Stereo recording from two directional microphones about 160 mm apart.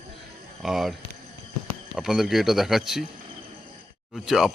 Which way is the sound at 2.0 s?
5° right (ahead or behind).